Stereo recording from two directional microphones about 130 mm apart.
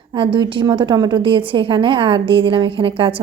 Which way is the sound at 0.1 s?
40° right (ahead or behind).